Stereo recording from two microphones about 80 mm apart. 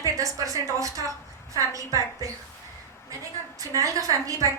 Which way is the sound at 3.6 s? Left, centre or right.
Right.